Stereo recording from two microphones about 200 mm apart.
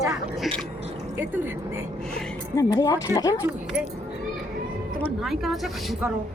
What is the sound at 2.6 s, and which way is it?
Speech, 15° left (ahead or behind).